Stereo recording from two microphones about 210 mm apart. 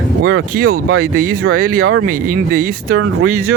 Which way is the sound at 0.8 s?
85° right.